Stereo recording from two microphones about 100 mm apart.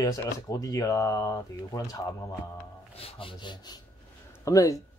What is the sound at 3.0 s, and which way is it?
Wood, 70° left (ahead or behind).